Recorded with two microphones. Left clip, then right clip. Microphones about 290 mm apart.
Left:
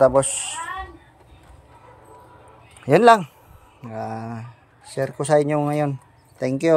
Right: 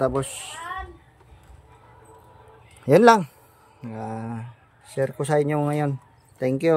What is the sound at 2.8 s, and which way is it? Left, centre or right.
Speech, centre.